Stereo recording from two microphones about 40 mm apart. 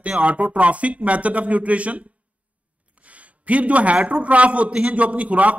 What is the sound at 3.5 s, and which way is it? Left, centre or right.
A man's voice, right.